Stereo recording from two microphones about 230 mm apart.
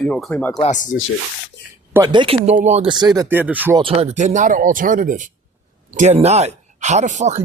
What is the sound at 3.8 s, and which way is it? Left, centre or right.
Speech, right.